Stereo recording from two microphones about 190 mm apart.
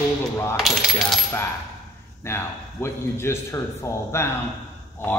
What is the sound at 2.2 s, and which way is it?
A man's voice, 15° left (ahead or behind).